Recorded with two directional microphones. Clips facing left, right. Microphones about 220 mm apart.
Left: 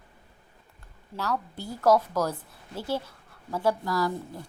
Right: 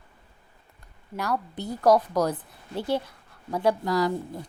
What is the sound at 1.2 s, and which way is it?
Speech, 15° right (ahead or behind).